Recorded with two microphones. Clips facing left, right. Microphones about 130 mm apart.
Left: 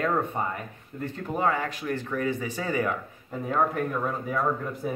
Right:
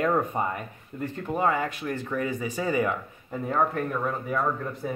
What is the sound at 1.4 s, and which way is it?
Speech, 10° right (ahead or behind).